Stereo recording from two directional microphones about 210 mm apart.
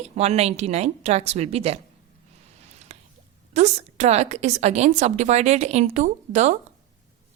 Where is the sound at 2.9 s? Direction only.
30° right (ahead or behind).